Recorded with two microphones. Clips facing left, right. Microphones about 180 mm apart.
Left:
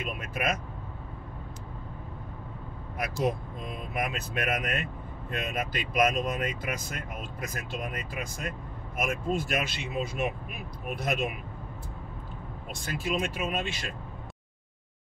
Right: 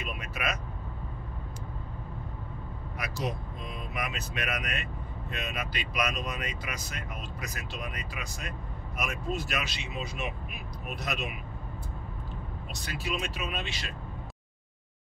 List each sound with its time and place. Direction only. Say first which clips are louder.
0.0 s speech: left 3 dB; 50° left (ahead or behind)
3.0 s speech: left 6 dB; 50° left (ahead or behind)
12.8 s speech: left 4 dB; 50° left (ahead or behind)